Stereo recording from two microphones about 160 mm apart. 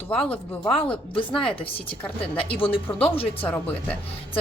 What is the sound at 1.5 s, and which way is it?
Speech, 35° left (ahead or behind).